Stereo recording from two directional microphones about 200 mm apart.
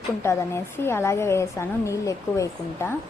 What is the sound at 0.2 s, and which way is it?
A woman's voice, 10° left (ahead or behind).